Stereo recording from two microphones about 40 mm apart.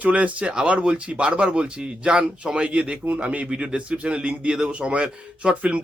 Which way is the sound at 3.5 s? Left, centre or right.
Right.